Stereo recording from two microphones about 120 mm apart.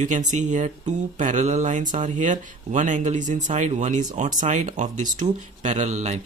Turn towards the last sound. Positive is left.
turn(degrees=-75)  # may be behind; listen again after turning